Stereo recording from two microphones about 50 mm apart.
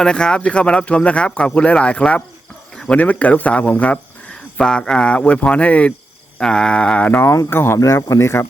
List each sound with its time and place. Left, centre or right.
0.0 s speech: centre
4.6 s speech: centre
6.4 s speech: centre
7.5 s speech: left
7.9 s speech: left